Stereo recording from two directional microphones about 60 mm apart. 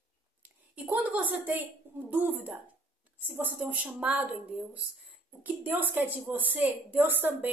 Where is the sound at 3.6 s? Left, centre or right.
Right.